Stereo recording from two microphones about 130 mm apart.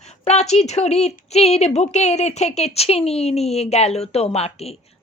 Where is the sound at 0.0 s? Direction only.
60° left (ahead or behind).